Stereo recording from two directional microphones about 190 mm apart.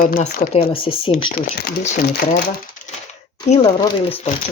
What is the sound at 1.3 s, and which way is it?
Speech, 50° left (ahead or behind).